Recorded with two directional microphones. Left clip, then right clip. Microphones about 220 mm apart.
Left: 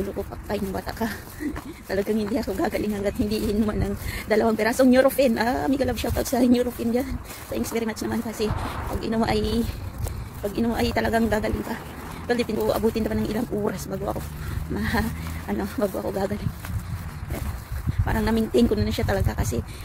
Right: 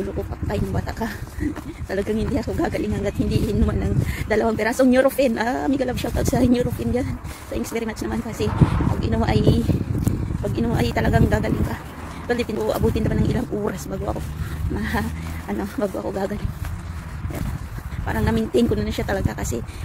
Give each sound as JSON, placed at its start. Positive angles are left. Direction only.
{"t": 0.5, "sound": "speech", "side_deg": 10}
{"t": 8.5, "sound": "speech", "side_deg": -50}
{"t": 9.0, "sound": "speech", "side_deg": 10}
{"t": 18.0, "sound": "speech", "side_deg": 10}